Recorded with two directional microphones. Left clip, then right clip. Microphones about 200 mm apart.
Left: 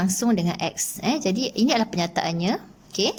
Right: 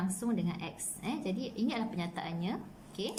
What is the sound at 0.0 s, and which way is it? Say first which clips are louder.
A woman's voice: left 13 dB; 55° left (ahead or behind).